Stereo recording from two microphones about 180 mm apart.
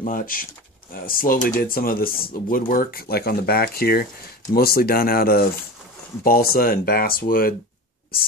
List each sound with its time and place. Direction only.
0.0 s speech: 50° left (ahead or behind)